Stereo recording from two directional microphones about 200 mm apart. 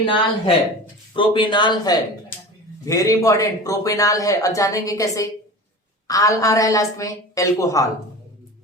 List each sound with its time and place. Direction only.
0.0 s a man's voice: 25° left (ahead or behind)